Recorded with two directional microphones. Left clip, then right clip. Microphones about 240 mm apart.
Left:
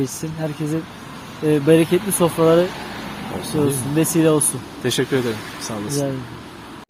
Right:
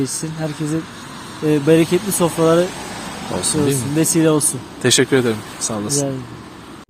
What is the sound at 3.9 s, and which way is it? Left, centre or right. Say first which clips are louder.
Speech: right 1 dB; centre.